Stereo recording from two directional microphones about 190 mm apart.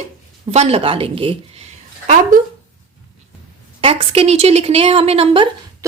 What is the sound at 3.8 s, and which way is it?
A woman's voice, 30° right (ahead or behind).